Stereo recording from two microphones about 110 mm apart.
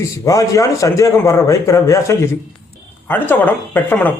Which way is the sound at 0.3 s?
30° left (ahead or behind).